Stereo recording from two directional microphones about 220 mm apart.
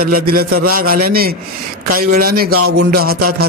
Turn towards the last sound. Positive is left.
turn(degrees=-45)  # may be behind; listen again after turning